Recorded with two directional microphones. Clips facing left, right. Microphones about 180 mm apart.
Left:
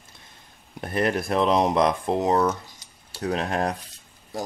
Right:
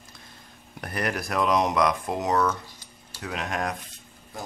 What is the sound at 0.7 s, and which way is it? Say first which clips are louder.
Speech: left 5 dB; 25° left (ahead or behind).